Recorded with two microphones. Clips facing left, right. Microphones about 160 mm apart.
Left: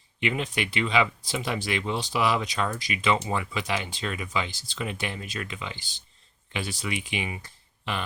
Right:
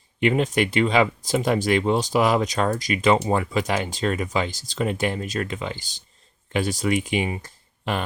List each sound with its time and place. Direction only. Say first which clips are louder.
0.2 s speech: right 8 dB; 45° right (ahead or behind)